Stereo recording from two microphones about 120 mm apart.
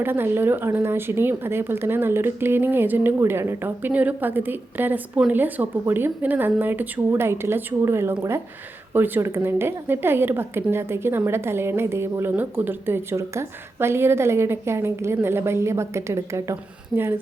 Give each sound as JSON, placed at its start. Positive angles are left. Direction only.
{"t": 0.0, "sound": "a woman's voice", "side_deg": -20}